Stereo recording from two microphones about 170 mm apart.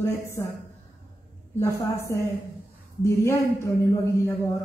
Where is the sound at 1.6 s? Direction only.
20° left (ahead or behind).